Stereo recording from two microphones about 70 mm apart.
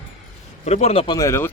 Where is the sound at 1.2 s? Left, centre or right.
Left.